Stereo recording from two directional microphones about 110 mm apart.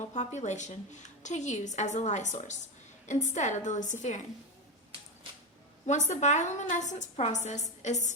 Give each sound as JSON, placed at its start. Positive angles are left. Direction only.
{"t": 0.1, "sound": "a woman's voice", "side_deg": 90}
{"t": 5.8, "sound": "a woman's voice", "side_deg": 90}